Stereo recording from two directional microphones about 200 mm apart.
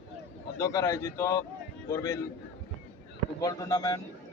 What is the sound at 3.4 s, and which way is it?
Speech, 15° left (ahead or behind).